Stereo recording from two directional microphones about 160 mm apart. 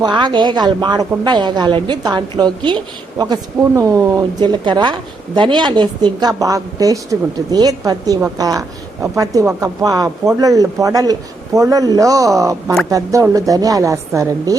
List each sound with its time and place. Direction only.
0.0 s a woman's voice: 30° right (ahead or behind)